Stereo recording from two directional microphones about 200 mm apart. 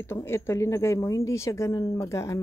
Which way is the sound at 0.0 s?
10° left (ahead or behind).